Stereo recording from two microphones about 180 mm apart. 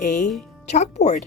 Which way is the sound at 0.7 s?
40° left (ahead or behind).